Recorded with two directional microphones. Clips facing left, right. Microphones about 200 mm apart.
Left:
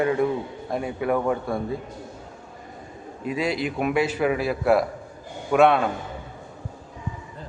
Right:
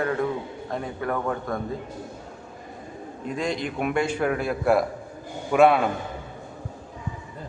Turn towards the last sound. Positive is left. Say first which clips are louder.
# even
turn(degrees=0)  # may be behind; listen again after turning